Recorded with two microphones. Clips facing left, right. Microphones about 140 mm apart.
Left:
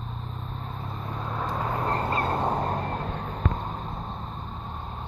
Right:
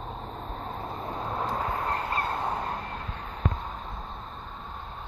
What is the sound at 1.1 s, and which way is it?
Vehicle, 20° right (ahead or behind).